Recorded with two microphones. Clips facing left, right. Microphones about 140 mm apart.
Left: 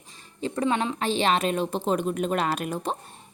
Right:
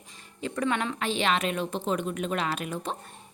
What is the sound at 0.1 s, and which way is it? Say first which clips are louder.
A woman's voice: left 3 dB; 30° left (ahead or behind).